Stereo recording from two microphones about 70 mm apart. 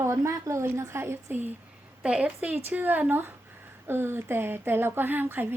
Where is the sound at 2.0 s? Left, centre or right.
Centre.